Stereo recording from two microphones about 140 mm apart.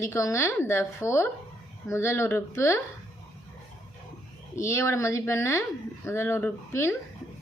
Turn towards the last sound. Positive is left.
turn(degrees=20)  # may be behind; listen again after turning